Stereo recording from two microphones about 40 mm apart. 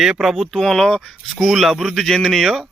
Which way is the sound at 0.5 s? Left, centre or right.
Centre.